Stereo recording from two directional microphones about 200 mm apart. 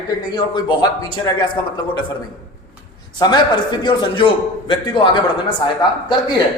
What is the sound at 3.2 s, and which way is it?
A man's voice, 20° left (ahead or behind).